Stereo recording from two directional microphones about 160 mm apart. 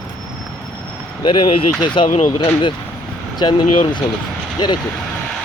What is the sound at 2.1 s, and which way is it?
Speech, 55° left (ahead or behind).